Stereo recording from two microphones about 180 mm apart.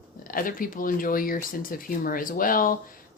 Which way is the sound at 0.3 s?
50° left (ahead or behind).